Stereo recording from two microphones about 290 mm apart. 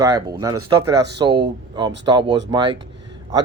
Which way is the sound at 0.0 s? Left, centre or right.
Centre.